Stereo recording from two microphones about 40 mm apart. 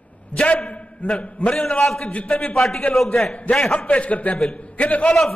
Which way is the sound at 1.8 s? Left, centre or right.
Centre.